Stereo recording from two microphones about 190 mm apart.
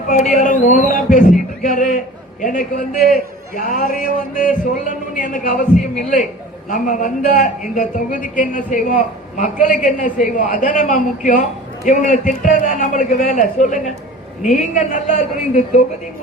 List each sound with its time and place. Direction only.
0.1 s a man's voice: 40° left (ahead or behind)